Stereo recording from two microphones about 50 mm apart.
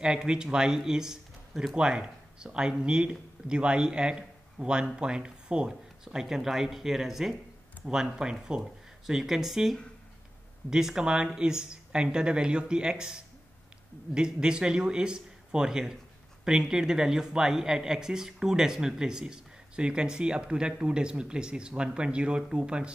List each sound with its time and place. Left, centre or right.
0.0 s speech: centre
9.0 s speech: centre